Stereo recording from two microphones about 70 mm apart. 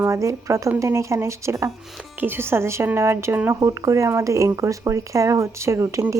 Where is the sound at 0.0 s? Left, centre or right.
Right.